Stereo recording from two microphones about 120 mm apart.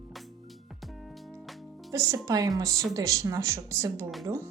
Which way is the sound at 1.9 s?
25° right (ahead or behind).